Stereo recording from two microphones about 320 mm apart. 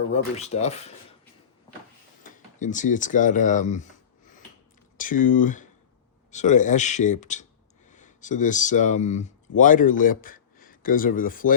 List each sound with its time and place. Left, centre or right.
0.1 s speech: centre
2.2 s a sound: left
4.9 s speech: left